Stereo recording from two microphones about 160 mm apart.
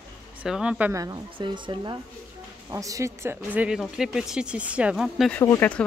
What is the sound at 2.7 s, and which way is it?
Speech, 20° right (ahead or behind).